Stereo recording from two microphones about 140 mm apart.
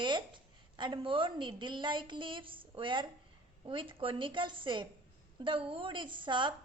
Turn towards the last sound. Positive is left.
turn(degrees=-35)  # may be behind; listen again after turning